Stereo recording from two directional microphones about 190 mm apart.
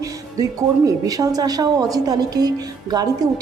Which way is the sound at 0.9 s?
20° right (ahead or behind).